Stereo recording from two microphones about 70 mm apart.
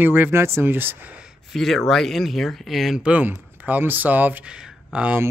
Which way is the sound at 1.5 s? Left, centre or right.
Centre.